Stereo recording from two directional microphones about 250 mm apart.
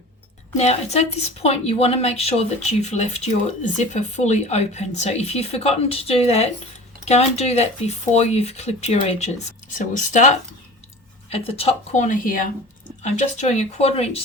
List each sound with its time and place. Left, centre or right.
0.5 s speech: left